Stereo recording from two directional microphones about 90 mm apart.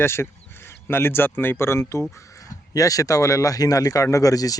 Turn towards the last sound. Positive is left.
turn(degrees=40)  # may be behind; listen again after turning